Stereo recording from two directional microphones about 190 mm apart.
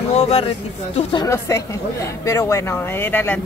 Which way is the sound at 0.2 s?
30° left (ahead or behind).